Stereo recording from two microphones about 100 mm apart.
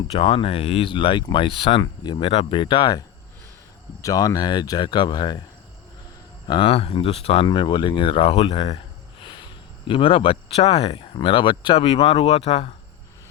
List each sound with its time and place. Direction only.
0.1 s speech: 70° left (ahead or behind); by 3.0 s 45° left (ahead or behind)
4.0 s speech: 35° left (ahead or behind)
6.5 s speech: 65° left (ahead or behind); by 7.4 s 85° left
7.4 s speech: 50° left (ahead or behind); by 8.8 s 65° left (ahead or behind)
9.8 s speech: 60° left (ahead or behind)
11.8 s speech: 70° left (ahead or behind)